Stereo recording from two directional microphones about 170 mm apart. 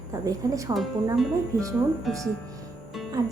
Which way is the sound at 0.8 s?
Centre (ahead or behind).